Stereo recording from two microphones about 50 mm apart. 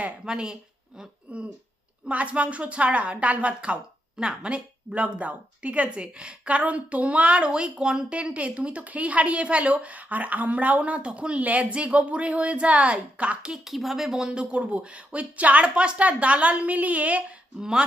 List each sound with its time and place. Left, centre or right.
0.3 s a woman's voice: centre
13.5 s a woman's voice: centre; by 17.3 s right
17.6 s speech: centre